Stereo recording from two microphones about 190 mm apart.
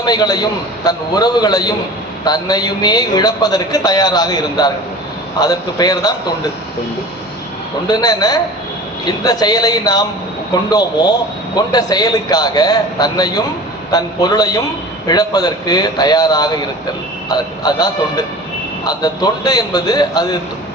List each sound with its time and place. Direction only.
0.0 s a man's voice: 20° left (ahead or behind)
7.9 s a man's voice: 20° left (ahead or behind)